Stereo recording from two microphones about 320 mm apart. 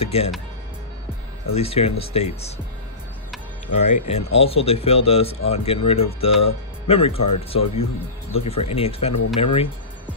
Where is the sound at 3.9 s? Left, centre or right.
Centre.